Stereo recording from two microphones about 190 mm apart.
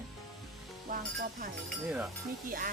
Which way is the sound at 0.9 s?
50° right (ahead or behind).